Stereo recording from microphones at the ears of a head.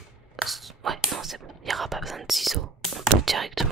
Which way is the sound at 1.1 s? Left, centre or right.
Right.